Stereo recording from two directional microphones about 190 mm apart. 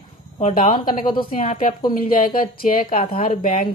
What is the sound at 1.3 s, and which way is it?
Speech, 45° left (ahead or behind).